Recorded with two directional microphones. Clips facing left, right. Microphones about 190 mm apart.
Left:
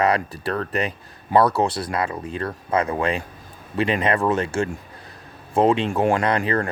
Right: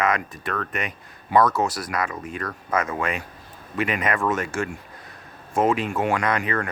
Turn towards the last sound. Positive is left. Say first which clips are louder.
# left 3 dB
turn(degrees=35)  # may be behind; listen again after turning